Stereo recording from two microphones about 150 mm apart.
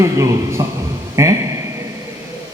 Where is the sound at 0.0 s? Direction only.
20° right (ahead or behind).